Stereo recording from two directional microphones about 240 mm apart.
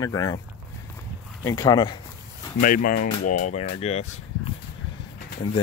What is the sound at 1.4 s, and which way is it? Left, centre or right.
Speech, centre.